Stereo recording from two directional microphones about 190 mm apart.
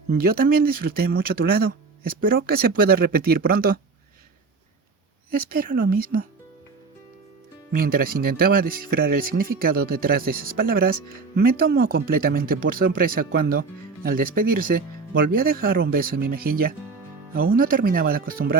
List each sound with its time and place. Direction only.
0.1 s speech: 55° right (ahead or behind)
5.3 s speech: 50° right (ahead or behind)
7.7 s speech: 50° right (ahead or behind)